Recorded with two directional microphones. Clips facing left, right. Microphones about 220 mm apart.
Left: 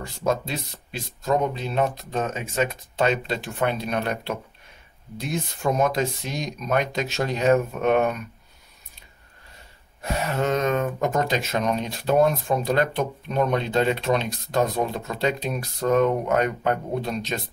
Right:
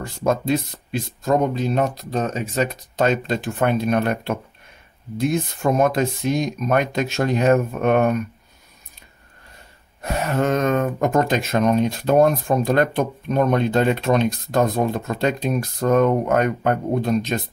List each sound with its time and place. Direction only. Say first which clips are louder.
0.0 s speech: right 4 dB; 50° right (ahead or behind)
10.0 s speech: right 3 dB; 50° right (ahead or behind)